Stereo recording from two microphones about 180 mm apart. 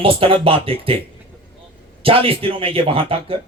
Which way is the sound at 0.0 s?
30° right (ahead or behind).